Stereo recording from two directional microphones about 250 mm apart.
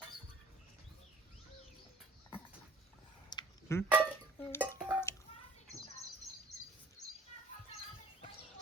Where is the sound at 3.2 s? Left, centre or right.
Centre.